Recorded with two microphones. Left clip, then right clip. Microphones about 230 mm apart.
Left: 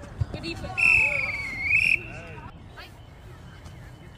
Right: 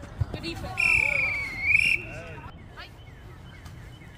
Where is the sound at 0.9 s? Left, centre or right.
Centre.